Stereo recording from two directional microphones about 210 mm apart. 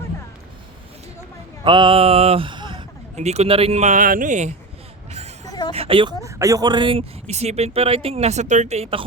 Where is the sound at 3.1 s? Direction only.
30° right (ahead or behind).